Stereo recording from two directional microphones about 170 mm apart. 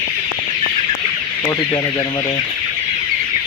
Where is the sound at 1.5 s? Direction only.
20° left (ahead or behind).